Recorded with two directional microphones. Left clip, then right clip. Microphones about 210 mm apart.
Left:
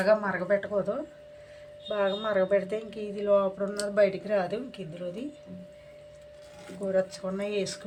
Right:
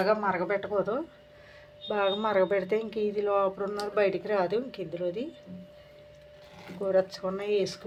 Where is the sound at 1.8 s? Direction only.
45° right (ahead or behind).